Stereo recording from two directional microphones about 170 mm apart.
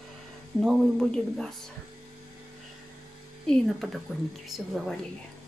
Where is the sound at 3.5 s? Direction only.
Centre (ahead or behind).